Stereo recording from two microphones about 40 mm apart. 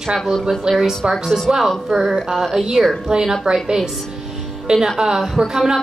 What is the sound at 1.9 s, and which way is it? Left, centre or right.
A woman's voice, centre.